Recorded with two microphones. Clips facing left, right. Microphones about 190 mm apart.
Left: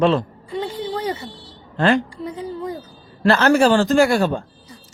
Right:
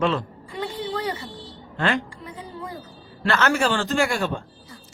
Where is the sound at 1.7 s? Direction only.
35° left (ahead or behind).